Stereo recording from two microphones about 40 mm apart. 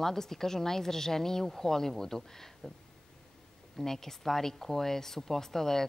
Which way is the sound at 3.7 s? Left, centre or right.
Centre.